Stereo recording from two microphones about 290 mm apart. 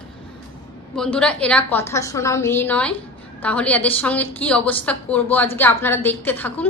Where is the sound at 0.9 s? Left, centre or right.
Centre.